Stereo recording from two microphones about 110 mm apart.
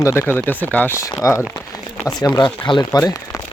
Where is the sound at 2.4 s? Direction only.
45° left (ahead or behind).